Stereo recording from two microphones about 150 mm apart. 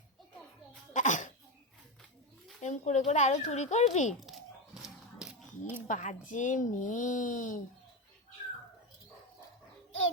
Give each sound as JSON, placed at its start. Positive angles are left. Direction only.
{"t": 0.9, "sound": "cough", "side_deg": 55}
{"t": 2.6, "sound": "speech", "side_deg": 50}
{"t": 4.3, "sound": "a sound", "side_deg": 0}
{"t": 5.9, "sound": "a woman's voice", "side_deg": 55}